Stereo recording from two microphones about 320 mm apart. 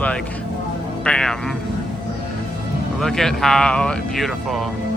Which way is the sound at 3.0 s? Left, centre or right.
Centre.